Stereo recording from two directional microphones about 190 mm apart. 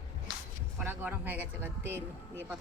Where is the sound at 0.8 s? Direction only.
10° right (ahead or behind).